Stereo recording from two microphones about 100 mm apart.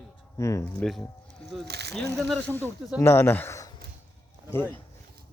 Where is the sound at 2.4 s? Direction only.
20° left (ahead or behind).